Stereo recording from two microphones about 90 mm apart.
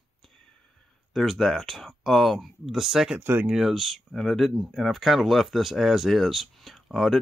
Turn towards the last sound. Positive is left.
turn(degrees=0)  # may be behind; listen again after turning